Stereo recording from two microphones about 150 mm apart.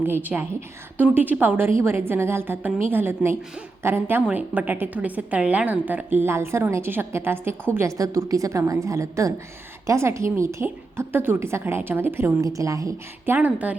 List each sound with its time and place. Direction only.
0.0 s a woman's voice: 15° right (ahead or behind)